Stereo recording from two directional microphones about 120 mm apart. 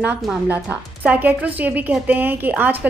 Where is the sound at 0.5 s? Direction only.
15° right (ahead or behind).